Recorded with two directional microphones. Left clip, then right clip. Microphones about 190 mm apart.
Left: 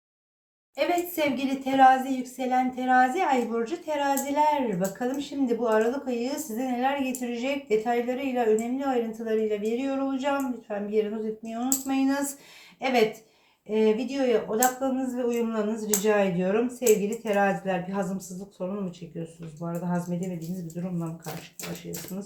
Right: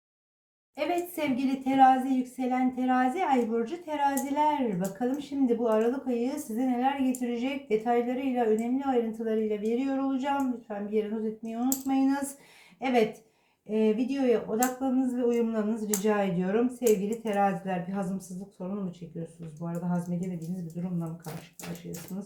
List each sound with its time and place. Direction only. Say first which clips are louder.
0.8 s a woman's voice: left 4 dB; 5° left (ahead or behind)